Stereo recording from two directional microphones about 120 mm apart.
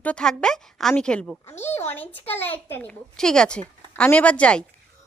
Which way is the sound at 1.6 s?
20° left (ahead or behind).